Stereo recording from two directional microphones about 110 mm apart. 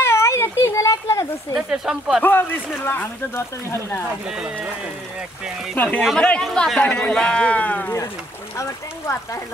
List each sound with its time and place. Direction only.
0.0 s a sound: 25° left (ahead or behind)
1.5 s speech: 10° right (ahead or behind)
2.2 s speech: 20° left (ahead or behind)
4.3 s speech: 10° right (ahead or behind)
5.8 s speech: 15° left (ahead or behind)
8.5 s speech: 25° left (ahead or behind)